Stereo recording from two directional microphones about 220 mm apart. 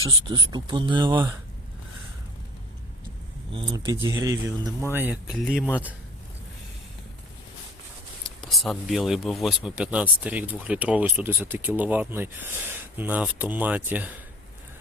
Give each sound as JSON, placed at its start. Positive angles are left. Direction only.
{"t": 0.0, "sound": "speech", "side_deg": -20}
{"t": 3.5, "sound": "speech", "side_deg": -20}
{"t": 8.4, "sound": "speech", "side_deg": 0}